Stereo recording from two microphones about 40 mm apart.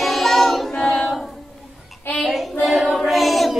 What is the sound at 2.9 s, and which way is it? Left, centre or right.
Child singing, centre.